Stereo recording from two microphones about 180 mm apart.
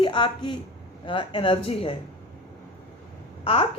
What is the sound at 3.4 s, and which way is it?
Speech, 30° left (ahead or behind).